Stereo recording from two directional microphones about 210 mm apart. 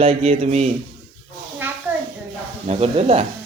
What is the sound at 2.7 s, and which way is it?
Speech, 30° right (ahead or behind).